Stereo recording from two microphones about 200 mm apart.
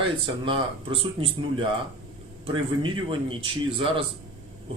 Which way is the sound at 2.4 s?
25° right (ahead or behind).